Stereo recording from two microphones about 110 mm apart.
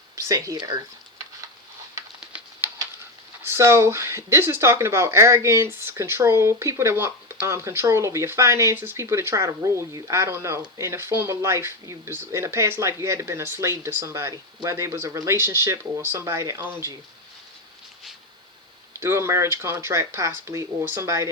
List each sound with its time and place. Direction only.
0.2 s speech: 30° right (ahead or behind)
2.2 s typewriter: 10° right (ahead or behind)
3.4 s speech: 25° right (ahead or behind)
18.9 s speech: 25° right (ahead or behind)